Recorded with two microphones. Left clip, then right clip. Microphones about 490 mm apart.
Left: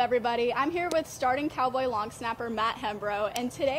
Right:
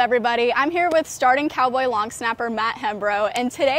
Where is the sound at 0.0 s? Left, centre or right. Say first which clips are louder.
Right 7 dB; right.